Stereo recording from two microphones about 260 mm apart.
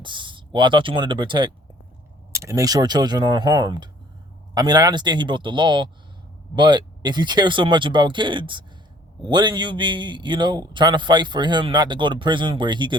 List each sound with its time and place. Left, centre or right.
0.0 s a man's voice: centre